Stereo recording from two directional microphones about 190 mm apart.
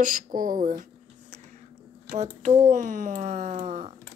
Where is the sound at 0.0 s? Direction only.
45° right (ahead or behind).